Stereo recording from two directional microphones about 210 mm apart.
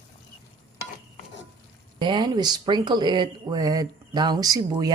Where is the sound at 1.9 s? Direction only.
20° right (ahead or behind).